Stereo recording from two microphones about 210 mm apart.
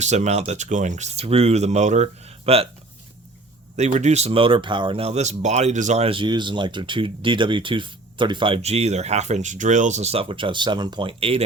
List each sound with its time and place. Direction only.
0.0 s speech: 35° right (ahead or behind)
3.8 s speech: 35° right (ahead or behind)